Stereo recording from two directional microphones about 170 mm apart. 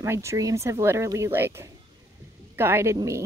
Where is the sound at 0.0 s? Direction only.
15° right (ahead or behind).